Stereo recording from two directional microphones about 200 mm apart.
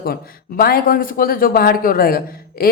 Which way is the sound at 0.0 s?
50° left (ahead or behind).